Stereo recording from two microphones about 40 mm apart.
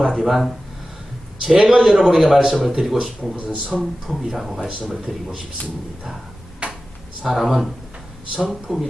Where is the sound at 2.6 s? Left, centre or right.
Centre.